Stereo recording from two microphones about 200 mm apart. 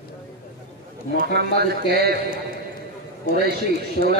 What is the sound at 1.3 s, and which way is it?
Speech, 50° right (ahead or behind).